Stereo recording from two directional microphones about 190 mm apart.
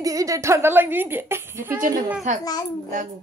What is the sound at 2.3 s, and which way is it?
Speech, 40° right (ahead or behind).